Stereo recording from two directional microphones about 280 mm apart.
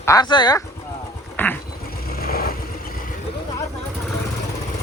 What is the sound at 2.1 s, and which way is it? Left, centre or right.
Vehicle, left.